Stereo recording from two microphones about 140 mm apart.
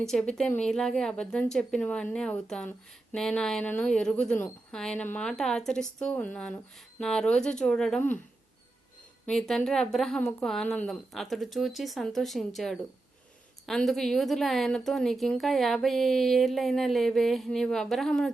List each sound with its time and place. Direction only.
0.0 s a woman's voice: 5° left (ahead or behind)
9.2 s a woman's voice: 5° left (ahead or behind)